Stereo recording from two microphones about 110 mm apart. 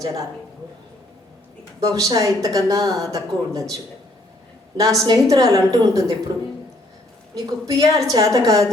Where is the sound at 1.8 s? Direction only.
30° right (ahead or behind).